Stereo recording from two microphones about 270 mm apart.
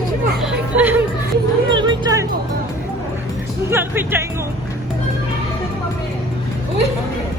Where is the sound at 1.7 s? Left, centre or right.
Centre.